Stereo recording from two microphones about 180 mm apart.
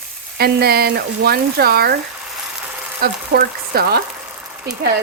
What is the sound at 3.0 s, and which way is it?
Sizzle, 60° right (ahead or behind).